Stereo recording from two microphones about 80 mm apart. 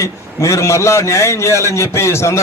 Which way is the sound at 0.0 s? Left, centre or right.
Left.